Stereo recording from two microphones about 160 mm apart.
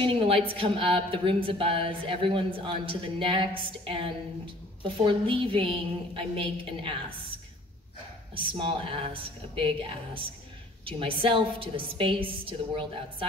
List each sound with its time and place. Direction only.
0.0 s speech: 35° right (ahead or behind)
8.5 s speech: 35° right (ahead or behind)